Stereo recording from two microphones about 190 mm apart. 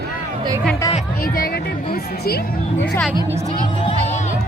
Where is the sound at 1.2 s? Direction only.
50° left (ahead or behind).